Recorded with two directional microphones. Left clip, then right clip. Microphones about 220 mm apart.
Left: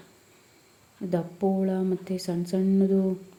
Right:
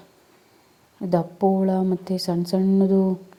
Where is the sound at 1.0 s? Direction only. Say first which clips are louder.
Right 7 dB; 20° right (ahead or behind).